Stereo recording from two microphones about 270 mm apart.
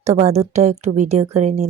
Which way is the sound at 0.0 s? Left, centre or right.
Right.